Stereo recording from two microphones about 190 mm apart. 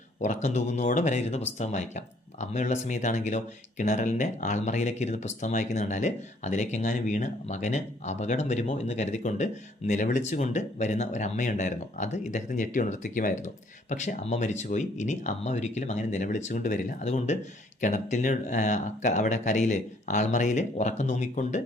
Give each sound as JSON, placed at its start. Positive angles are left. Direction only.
{"t": 0.2, "sound": "speech", "side_deg": 40}